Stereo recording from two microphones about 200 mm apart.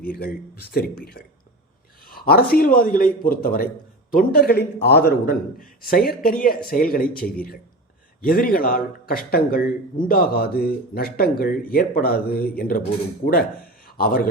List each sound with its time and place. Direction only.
0.1 s a man's voice: 50° left (ahead or behind)
13.8 s speech: 45° left (ahead or behind)